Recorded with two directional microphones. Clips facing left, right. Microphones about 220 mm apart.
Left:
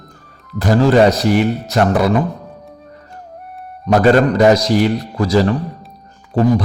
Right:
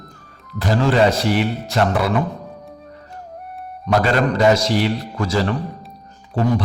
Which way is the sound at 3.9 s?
45° left (ahead or behind).